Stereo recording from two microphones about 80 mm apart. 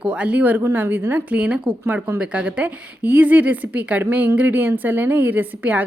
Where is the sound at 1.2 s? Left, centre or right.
Centre.